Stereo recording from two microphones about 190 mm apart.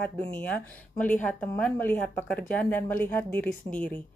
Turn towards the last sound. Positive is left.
turn(degrees=5)  # may be behind; listen again after turning